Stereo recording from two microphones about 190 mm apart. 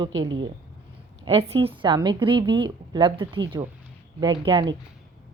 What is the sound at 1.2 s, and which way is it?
A woman's voice, 30° right (ahead or behind).